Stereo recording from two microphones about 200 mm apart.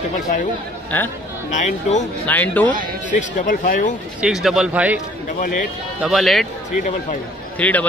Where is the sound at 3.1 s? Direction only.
40° left (ahead or behind).